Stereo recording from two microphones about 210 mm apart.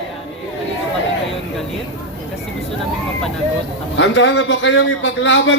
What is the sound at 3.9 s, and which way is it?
A man's voice, 60° left (ahead or behind).